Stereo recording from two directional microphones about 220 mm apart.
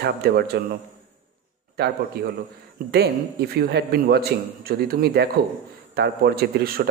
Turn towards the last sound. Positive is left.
turn(degrees=-45)  # may be behind; listen again after turning